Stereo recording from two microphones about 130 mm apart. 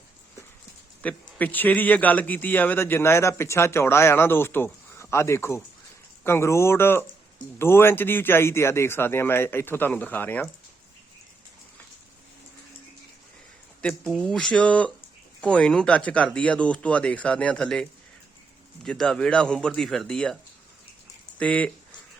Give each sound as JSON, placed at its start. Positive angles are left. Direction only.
{"t": 1.0, "sound": "a man's voice", "side_deg": 10}
{"t": 13.8, "sound": "a man's voice", "side_deg": 5}
{"t": 18.9, "sound": "speech", "side_deg": 5}